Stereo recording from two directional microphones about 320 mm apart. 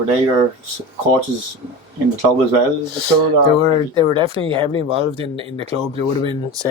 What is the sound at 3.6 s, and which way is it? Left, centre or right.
Speech, centre.